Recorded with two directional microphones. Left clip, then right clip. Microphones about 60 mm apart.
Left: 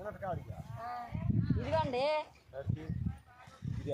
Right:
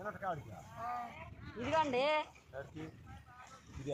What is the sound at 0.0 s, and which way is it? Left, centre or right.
Cattle, left.